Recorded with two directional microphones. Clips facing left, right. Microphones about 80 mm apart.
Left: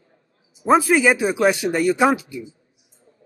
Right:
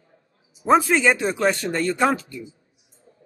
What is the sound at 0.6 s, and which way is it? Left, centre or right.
Speech, centre.